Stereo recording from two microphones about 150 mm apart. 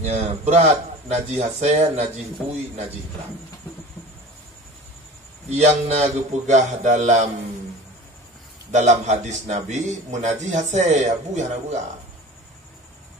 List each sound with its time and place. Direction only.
0.0 s a man's voice: 45° right (ahead or behind)
5.5 s a man's voice: 45° right (ahead or behind)
8.7 s a man's voice: 50° right (ahead or behind)